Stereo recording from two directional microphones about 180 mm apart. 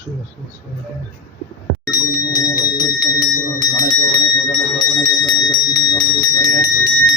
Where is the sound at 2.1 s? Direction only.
20° left (ahead or behind).